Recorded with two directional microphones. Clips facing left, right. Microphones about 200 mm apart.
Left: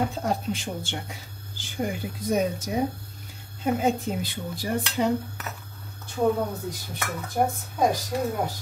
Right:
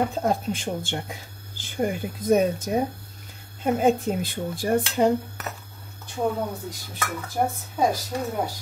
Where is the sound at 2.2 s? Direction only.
50° right (ahead or behind).